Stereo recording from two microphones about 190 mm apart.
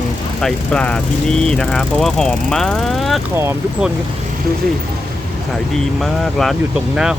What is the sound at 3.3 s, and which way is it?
Speech, 10° right (ahead or behind).